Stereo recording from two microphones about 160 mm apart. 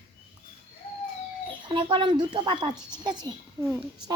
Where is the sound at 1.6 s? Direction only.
30° right (ahead or behind).